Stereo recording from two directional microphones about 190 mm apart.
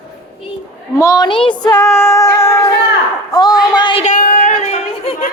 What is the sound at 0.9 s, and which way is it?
Female singing, 15° left (ahead or behind).